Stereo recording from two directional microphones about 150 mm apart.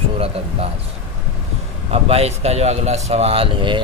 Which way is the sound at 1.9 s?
45° right (ahead or behind).